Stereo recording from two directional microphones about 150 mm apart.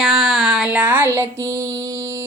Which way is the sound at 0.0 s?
Centre (ahead or behind).